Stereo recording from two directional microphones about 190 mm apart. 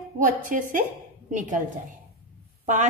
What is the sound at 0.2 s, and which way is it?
Speech, 45° right (ahead or behind).